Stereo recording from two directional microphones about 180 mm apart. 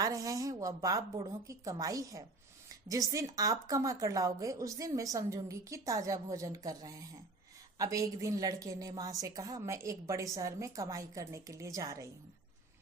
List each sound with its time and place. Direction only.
0.0 s a woman's voice: 20° right (ahead or behind)